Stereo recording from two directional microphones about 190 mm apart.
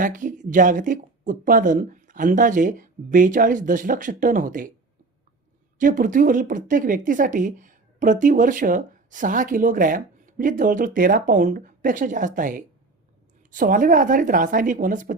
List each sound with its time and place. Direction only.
0.0 s speech: 45° right (ahead or behind)
5.8 s speech: 45° right (ahead or behind)